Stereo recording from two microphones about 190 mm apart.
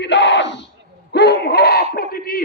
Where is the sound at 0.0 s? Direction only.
70° left (ahead or behind).